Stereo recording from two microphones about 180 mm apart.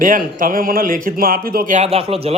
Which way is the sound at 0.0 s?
50° right (ahead or behind).